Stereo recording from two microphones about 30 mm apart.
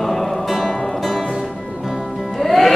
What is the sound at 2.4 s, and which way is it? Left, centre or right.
Music, centre.